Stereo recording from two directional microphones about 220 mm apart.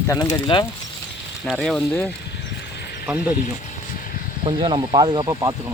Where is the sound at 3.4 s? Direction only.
35° left (ahead or behind).